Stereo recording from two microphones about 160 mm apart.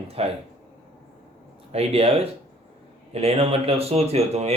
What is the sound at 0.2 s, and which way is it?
Speech, 40° right (ahead or behind).